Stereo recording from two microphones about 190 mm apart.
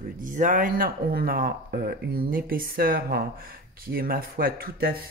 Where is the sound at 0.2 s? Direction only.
45° right (ahead or behind).